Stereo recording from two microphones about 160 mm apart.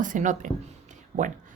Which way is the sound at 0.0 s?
55° right (ahead or behind).